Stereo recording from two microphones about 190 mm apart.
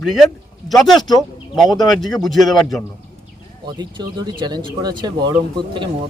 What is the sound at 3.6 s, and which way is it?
Speech, 20° right (ahead or behind).